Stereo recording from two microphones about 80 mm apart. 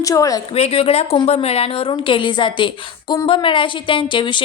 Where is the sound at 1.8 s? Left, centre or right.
Left.